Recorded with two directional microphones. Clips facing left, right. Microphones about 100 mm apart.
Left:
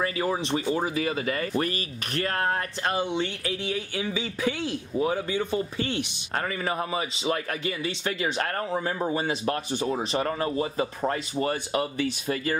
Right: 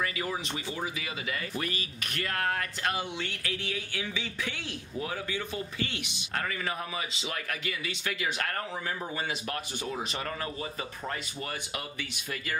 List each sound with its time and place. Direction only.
0.0 s speech: 35° left (ahead or behind)